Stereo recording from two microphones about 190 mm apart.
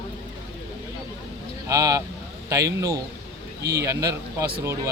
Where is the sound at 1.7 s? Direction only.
15° right (ahead or behind).